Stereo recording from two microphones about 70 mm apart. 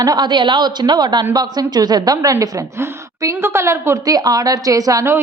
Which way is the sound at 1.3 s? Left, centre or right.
Right.